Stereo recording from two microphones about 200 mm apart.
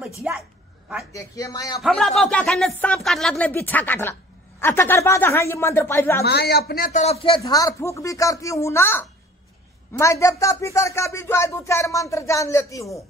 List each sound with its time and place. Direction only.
0.3 s a sound: 5° right (ahead or behind)
1.1 s speech: 15° left (ahead or behind)
1.8 s speech: 5° left (ahead or behind)
6.2 s speech: 55° left (ahead or behind); by 13.0 s 15° left (ahead or behind)